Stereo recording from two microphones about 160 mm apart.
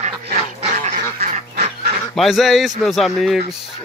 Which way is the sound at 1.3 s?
45° right (ahead or behind).